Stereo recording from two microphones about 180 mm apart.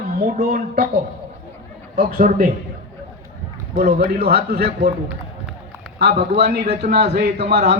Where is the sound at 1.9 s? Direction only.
55° right (ahead or behind).